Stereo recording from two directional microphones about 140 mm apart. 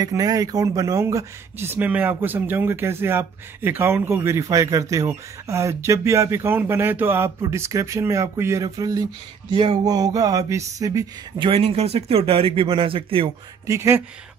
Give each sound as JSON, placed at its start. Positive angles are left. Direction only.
{"t": 0.0, "sound": "speech", "side_deg": -25}
{"t": 9.6, "sound": "a sound", "side_deg": -30}
{"t": 13.7, "sound": "speech", "side_deg": -20}